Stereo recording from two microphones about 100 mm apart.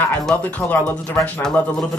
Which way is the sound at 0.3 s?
15° left (ahead or behind).